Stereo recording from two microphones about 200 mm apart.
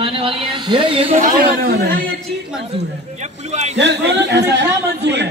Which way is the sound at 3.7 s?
60° right (ahead or behind).